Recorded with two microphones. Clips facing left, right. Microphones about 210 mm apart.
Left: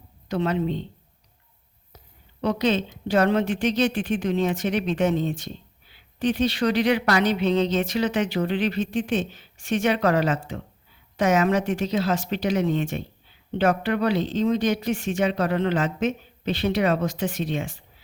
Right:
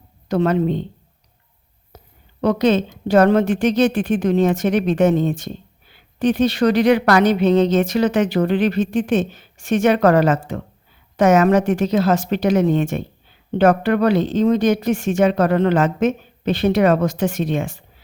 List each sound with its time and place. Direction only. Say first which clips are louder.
0.3 s a woman's voice: right 7 dB; 45° right (ahead or behind)
2.4 s a woman's voice: right 6 dB; 45° right (ahead or behind)